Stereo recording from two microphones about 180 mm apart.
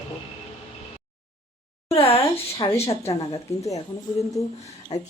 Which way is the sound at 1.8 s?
30° left (ahead or behind).